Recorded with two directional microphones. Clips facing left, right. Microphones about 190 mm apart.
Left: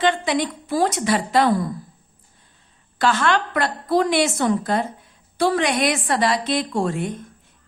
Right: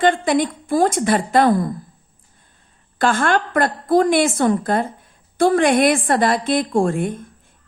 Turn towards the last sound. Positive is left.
turn(degrees=-50)  # may be behind; listen again after turning